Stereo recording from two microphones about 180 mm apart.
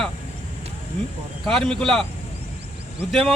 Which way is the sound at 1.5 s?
Centre (ahead or behind).